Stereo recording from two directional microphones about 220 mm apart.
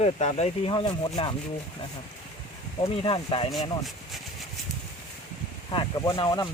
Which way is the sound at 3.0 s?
25° left (ahead or behind).